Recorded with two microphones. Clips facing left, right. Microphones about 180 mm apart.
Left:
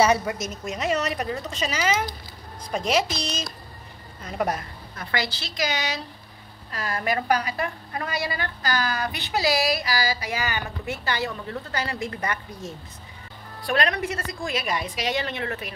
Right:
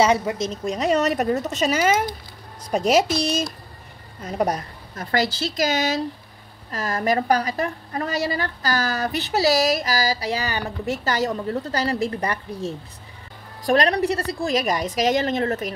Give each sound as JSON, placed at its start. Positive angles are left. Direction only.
{"t": 0.0, "sound": "a woman's voice", "side_deg": -20}
{"t": 4.2, "sound": "a woman's voice", "side_deg": -40}